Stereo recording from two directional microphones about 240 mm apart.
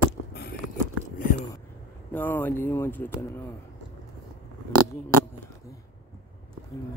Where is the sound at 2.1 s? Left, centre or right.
Centre.